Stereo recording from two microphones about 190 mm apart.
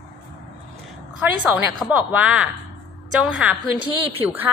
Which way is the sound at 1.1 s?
5° right (ahead or behind).